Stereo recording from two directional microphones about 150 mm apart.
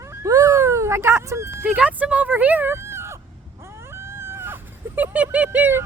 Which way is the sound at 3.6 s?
15° right (ahead or behind).